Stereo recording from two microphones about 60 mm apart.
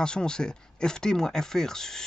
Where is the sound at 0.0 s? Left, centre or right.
Centre.